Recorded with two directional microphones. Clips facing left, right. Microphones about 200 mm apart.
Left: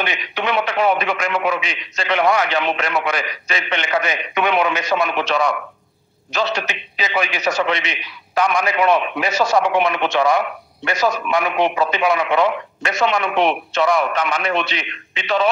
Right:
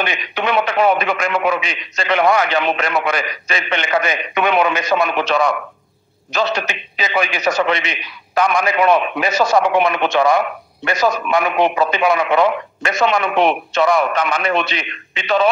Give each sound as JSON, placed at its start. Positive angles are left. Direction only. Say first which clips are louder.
{"t": 0.0, "sound": "a man's voice", "louder": "right 2 dB", "side_deg": -50}